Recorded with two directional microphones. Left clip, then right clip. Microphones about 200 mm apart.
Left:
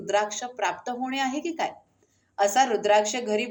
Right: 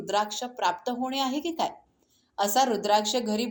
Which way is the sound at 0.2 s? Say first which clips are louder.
Left 1 dB; 35° right (ahead or behind).